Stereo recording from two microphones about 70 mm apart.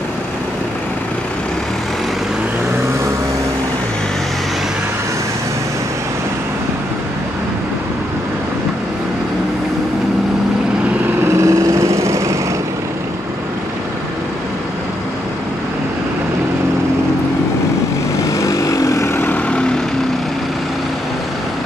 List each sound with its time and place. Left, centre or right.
11.2 s lawn mower: right
18.3 s vehicle: left
19.1 s vehicle: left